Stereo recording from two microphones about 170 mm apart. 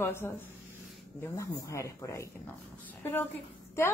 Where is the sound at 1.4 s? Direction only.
20° left (ahead or behind).